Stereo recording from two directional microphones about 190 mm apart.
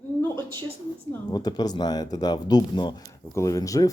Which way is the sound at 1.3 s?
20° left (ahead or behind).